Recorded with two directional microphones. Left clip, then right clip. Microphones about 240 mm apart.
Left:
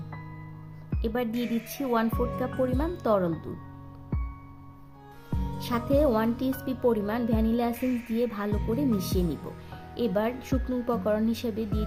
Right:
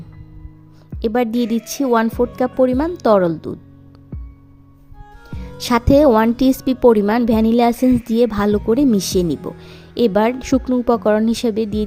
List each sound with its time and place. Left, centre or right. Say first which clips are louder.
1.0 s speech: right 12 dB; right
5.5 s speech: right 12 dB; right